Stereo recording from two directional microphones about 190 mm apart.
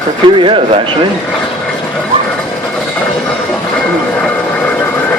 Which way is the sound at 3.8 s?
5° left (ahead or behind).